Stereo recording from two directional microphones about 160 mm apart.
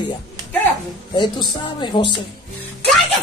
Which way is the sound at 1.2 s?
30° left (ahead or behind).